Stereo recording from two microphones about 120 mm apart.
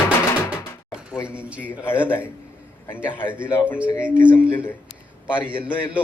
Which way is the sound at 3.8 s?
10° right (ahead or behind).